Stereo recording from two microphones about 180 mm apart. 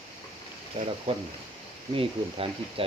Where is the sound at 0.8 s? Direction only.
35° right (ahead or behind).